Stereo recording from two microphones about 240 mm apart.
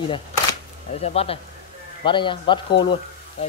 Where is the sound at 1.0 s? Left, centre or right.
Left.